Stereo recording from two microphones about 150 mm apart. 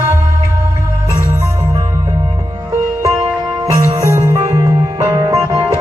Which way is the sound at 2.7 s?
20° right (ahead or behind).